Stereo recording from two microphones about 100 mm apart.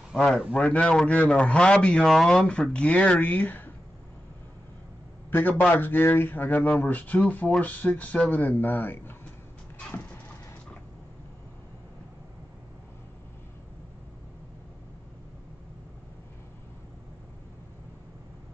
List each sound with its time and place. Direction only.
0.1 s a man's voice: centre (ahead or behind)
0.5 s a man's voice: 15° left (ahead or behind)
5.3 s a man's voice: 15° left (ahead or behind)
9.8 s a sound: 10° left (ahead or behind)